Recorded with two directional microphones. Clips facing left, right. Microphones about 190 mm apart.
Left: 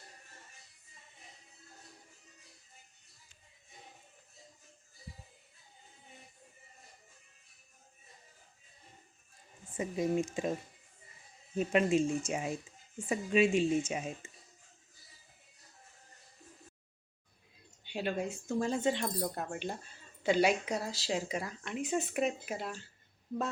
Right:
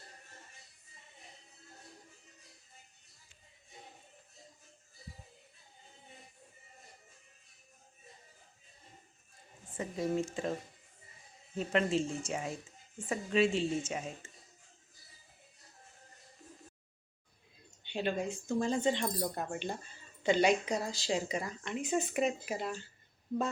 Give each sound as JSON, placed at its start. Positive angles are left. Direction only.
{"t": 9.7, "sound": "speech", "side_deg": 15}
{"t": 11.5, "sound": "speech", "side_deg": 15}
{"t": 17.8, "sound": "speech", "side_deg": 5}